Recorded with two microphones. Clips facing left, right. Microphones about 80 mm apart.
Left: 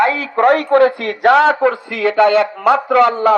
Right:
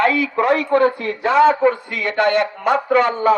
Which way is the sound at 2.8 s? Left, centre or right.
Left.